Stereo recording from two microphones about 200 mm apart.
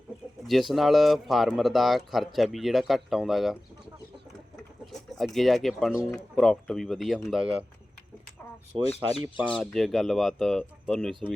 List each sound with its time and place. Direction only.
0.4 s speech: centre (ahead or behind)
4.9 s speech: centre (ahead or behind)
8.8 s speech: 30° left (ahead or behind)
9.6 s speech: 5° left (ahead or behind)